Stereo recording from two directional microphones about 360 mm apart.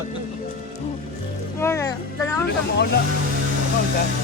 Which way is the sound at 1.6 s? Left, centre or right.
Centre.